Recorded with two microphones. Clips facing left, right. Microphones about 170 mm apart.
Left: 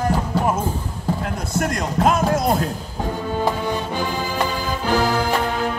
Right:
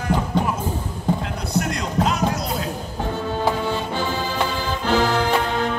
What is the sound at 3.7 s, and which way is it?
Music, 10° left (ahead or behind).